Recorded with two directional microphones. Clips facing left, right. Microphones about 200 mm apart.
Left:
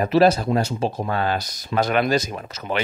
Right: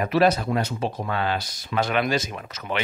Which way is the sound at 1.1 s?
40° left (ahead or behind).